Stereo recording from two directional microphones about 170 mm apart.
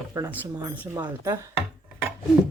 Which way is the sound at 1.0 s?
20° right (ahead or behind).